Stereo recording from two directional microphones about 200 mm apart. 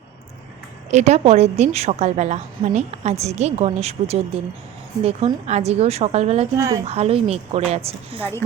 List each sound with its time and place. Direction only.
0.9 s a woman's voice: 35° right (ahead or behind)
6.6 s speech: 15° right (ahead or behind)
6.8 s a woman's voice: 30° right (ahead or behind)
8.2 s speech: 10° left (ahead or behind)